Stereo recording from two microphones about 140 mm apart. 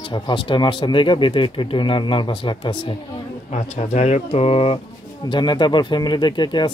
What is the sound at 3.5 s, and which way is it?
Speech, 55° left (ahead or behind).